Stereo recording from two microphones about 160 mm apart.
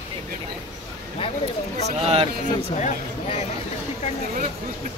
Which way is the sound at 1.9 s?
40° right (ahead or behind).